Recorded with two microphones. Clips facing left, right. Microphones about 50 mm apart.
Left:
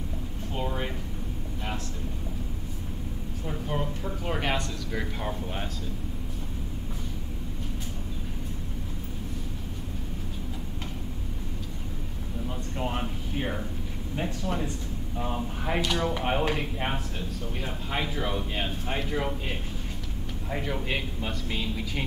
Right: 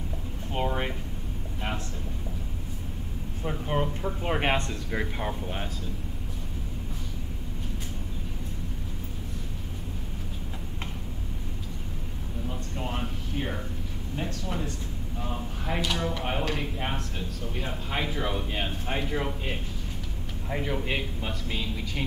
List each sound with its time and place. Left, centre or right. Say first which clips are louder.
3.4 s speech: right 3 dB; right
5.2 s speech: even; centre
12.4 s speech: left 2 dB; centre
14.4 s a man's voice: left 2 dB; left; by 22.0 s centre